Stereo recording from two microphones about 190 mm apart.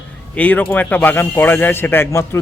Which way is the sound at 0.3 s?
10° left (ahead or behind).